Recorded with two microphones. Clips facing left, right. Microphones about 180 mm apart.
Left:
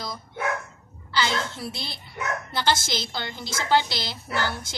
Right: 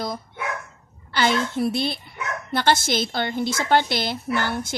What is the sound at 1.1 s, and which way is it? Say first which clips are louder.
A woman's voice: right 5 dB; 55° right (ahead or behind).